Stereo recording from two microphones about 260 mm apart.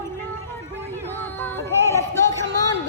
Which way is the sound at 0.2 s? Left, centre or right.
Centre.